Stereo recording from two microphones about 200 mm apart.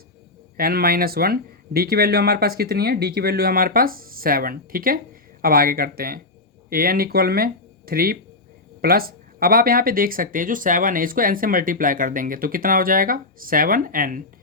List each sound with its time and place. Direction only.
0.5 s speech: 50° right (ahead or behind)